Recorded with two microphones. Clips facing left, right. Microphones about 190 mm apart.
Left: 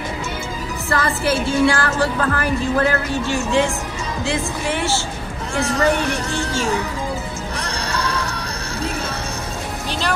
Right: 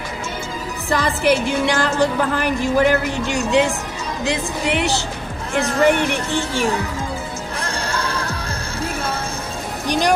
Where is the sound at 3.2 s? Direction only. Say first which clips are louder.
Right 2 dB; 15° right (ahead or behind).